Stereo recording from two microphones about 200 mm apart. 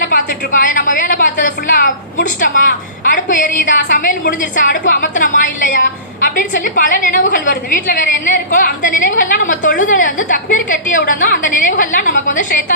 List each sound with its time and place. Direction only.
0.1 s a woman's voice: 40° left (ahead or behind)